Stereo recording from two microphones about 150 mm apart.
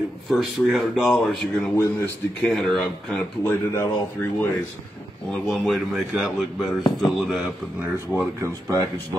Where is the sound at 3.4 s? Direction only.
20° left (ahead or behind).